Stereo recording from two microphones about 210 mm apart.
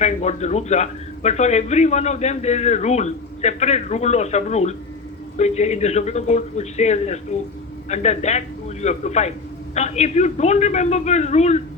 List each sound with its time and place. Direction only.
0.0 s a man's voice: 30° left (ahead or behind)